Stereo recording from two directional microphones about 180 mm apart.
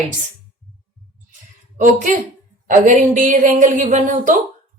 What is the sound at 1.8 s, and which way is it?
A woman's voice, 45° right (ahead or behind).